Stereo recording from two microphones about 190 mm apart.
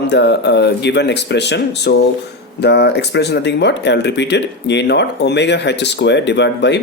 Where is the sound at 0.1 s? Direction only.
65° left (ahead or behind).